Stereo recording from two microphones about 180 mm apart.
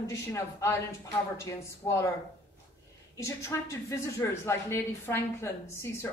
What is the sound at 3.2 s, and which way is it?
A woman's voice, 15° left (ahead or behind).